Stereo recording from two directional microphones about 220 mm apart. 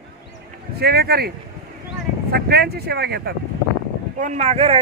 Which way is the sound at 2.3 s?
45° right (ahead or behind).